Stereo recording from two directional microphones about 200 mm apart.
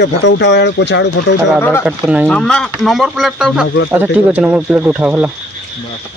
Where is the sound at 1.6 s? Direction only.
10° left (ahead or behind).